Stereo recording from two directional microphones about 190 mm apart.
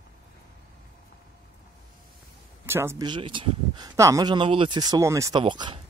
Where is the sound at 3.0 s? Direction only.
25° right (ahead or behind).